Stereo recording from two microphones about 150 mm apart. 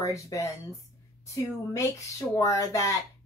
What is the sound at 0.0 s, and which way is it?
Speech, 20° left (ahead or behind).